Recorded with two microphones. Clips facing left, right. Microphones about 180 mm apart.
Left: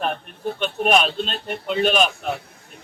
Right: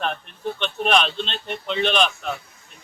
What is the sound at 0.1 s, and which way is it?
Speech, 45° left (ahead or behind).